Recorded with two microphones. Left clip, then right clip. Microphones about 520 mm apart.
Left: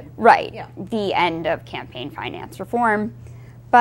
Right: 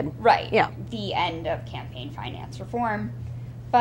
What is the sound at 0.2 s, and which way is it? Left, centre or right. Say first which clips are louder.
A woman's voice: left 5 dB; left.